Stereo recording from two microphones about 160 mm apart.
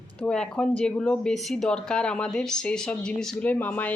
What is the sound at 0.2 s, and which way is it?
Speech, 5° left (ahead or behind).